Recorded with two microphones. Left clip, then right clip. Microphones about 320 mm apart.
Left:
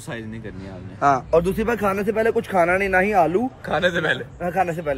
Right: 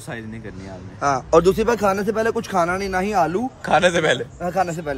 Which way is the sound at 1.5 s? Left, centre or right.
Centre.